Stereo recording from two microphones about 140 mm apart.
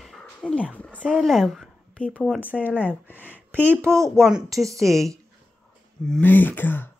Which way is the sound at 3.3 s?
15° right (ahead or behind).